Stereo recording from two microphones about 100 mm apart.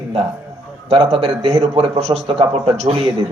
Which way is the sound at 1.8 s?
85° right.